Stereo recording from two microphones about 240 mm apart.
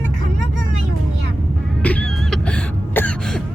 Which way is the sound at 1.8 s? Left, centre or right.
Centre.